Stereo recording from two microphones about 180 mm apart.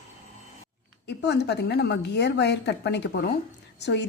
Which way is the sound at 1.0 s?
70° left (ahead or behind).